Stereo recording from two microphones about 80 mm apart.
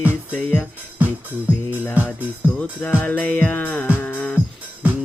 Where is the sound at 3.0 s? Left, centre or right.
Centre.